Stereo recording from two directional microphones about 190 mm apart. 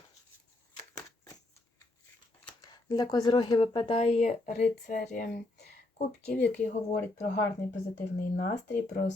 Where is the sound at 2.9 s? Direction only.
20° left (ahead or behind); by 5.3 s 45° left (ahead or behind).